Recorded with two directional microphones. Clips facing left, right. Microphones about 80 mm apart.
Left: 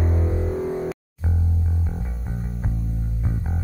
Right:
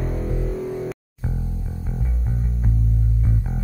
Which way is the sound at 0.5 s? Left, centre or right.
Left.